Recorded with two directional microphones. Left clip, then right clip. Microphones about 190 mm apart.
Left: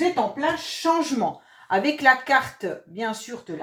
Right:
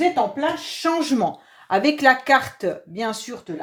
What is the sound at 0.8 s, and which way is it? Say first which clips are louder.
Speech: right 2 dB; 50° right (ahead or behind).